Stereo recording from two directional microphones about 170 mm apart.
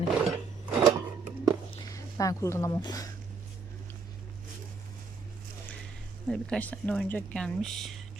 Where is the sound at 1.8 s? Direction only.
20° left (ahead or behind).